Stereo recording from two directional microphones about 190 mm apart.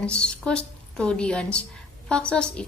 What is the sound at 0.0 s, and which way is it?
A woman's voice, 5° left (ahead or behind).